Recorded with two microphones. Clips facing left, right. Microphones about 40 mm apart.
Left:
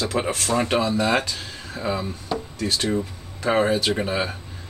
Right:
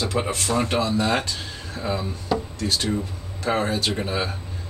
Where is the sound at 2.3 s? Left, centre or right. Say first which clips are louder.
Right 2 dB; centre.